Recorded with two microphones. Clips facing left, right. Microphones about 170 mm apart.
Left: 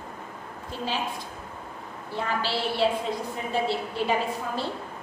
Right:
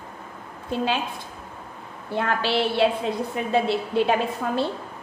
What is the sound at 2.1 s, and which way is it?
A woman's voice, 60° right (ahead or behind).